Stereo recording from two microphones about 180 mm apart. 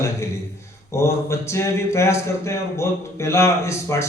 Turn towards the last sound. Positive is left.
turn(degrees=15)  # may be behind; listen again after turning